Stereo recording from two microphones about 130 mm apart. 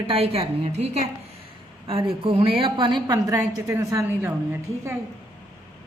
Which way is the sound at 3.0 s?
25° right (ahead or behind).